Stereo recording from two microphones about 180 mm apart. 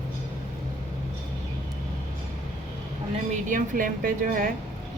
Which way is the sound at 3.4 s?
45° right (ahead or behind).